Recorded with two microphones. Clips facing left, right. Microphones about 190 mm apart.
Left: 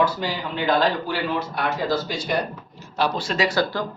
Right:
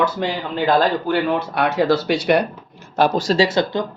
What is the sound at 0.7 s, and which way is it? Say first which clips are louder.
Speech: right 4 dB; 55° right (ahead or behind).